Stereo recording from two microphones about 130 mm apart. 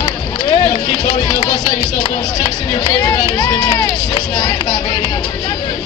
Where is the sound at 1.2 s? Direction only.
35° left (ahead or behind).